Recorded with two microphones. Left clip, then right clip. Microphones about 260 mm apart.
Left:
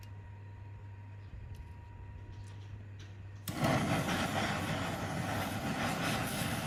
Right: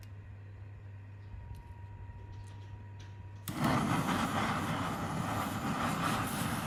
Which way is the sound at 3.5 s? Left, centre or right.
Centre.